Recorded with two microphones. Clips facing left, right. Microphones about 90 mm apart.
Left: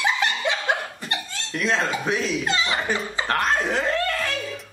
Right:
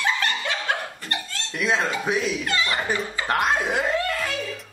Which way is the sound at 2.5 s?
20° left (ahead or behind).